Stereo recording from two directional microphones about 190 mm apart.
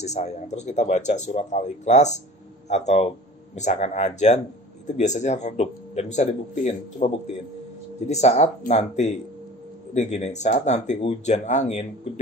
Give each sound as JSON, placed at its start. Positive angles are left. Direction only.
{"t": 0.0, "sound": "speech", "side_deg": 35}
{"t": 8.1, "sound": "speech", "side_deg": 35}